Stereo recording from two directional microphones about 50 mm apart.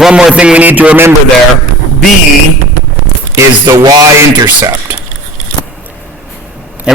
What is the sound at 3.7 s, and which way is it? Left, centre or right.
Music, right.